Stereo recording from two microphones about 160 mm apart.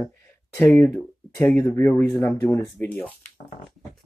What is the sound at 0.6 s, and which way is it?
Speech, 10° left (ahead or behind).